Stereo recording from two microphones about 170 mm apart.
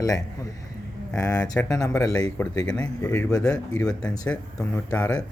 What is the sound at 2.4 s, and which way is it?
Speech, 10° left (ahead or behind).